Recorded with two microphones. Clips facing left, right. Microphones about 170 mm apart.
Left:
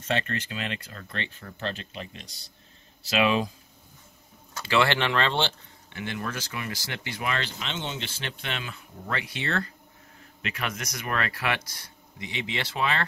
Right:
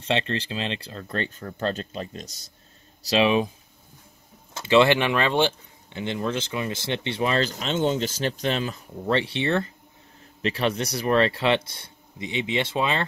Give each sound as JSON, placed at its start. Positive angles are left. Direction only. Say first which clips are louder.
{"t": 0.0, "sound": "speech", "louder": "right 3 dB", "side_deg": -25}
{"t": 3.3, "sound": "speech", "louder": "right 3 dB", "side_deg": -20}
{"t": 4.6, "sound": "speech", "louder": "right 6 dB", "side_deg": -20}